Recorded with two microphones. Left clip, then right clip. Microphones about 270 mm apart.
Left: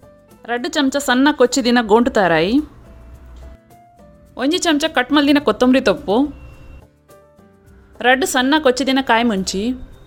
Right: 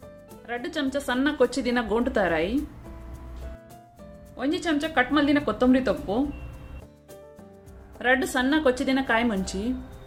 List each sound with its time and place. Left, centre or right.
0.4 s speech: left
4.4 s speech: left
7.9 s speech: left